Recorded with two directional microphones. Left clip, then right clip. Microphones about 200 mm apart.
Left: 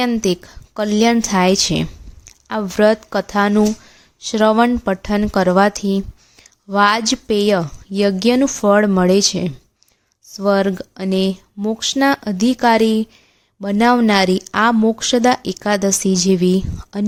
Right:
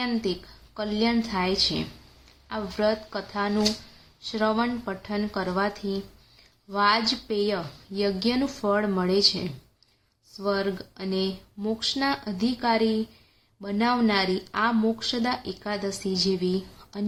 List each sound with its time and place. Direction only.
0.0 s a woman's voice: 55° left (ahead or behind)